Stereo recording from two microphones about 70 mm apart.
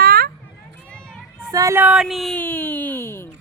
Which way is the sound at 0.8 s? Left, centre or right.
Centre.